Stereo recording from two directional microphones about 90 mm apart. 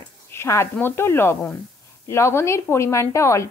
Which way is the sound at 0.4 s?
30° left (ahead or behind).